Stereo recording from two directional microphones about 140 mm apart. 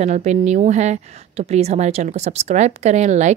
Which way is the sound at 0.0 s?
55° right (ahead or behind).